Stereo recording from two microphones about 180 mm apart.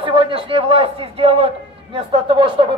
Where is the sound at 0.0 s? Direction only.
30° right (ahead or behind).